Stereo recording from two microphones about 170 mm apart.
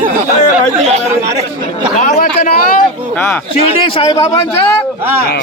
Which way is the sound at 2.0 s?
45° left (ahead or behind).